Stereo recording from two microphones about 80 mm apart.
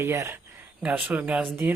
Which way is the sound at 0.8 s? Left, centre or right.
Centre.